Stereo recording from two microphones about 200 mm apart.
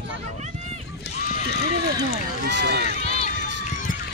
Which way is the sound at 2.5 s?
60° right (ahead or behind).